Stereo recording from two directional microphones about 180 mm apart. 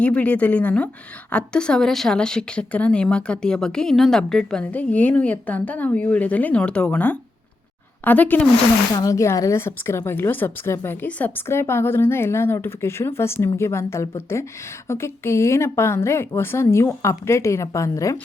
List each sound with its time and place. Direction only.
0.0 s a woman's voice: 5° left (ahead or behind)